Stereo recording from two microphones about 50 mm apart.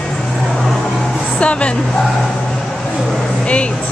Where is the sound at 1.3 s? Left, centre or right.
Left.